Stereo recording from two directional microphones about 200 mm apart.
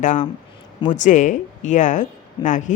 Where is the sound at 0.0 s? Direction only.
40° left (ahead or behind).